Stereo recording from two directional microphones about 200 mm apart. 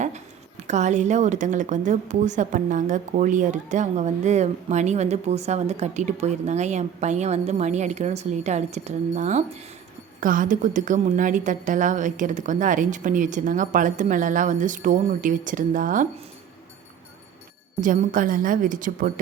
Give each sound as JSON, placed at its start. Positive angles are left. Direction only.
{"t": 0.7, "sound": "speech", "side_deg": -35}
{"t": 17.7, "sound": "a woman's voice", "side_deg": -40}